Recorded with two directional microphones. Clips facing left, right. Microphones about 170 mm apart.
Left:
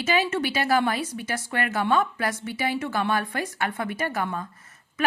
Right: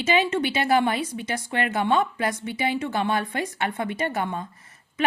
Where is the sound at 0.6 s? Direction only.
20° right (ahead or behind).